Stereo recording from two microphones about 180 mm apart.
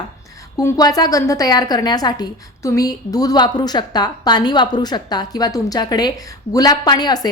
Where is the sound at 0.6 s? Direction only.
20° left (ahead or behind).